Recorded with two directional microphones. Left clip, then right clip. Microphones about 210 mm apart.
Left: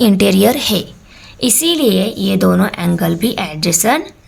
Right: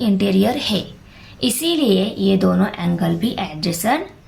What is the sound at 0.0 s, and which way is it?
A woman's voice, 40° left (ahead or behind).